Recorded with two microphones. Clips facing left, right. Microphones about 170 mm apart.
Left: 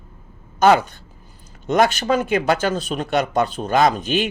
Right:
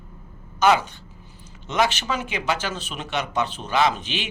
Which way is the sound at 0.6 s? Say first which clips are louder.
Left 4 dB; 45° left (ahead or behind).